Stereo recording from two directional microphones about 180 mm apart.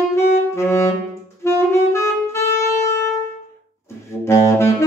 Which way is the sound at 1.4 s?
15° left (ahead or behind).